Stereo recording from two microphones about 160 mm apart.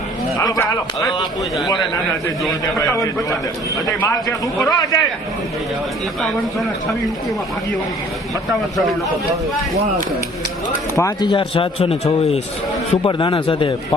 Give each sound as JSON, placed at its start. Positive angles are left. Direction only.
{"t": 0.3, "sound": "a man's voice", "side_deg": 20}
{"t": 2.7, "sound": "a man's voice", "side_deg": 20}
{"t": 10.9, "sound": "speech", "side_deg": 25}